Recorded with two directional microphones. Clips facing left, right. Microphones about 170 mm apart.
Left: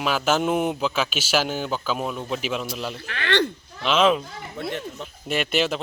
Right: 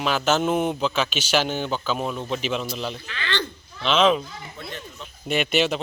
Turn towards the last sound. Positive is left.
turn(degrees=0)  # may be behind; listen again after turning